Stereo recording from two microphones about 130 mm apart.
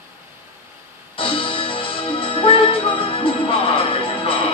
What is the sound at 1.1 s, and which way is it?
Music, 45° left (ahead or behind).